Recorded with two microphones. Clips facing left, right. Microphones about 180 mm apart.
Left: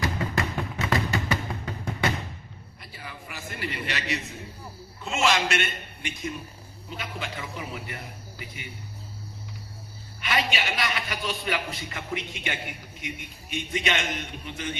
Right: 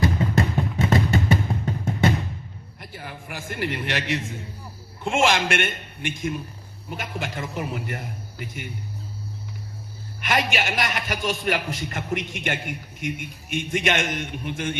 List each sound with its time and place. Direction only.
0.0 s music: 25° right (ahead or behind)
2.8 s a sound: 55° right (ahead or behind)
5.0 s a man's voice: 50° right (ahead or behind)
10.2 s a man's voice: 45° right (ahead or behind)